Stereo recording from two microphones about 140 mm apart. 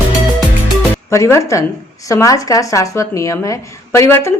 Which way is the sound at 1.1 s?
20° left (ahead or behind).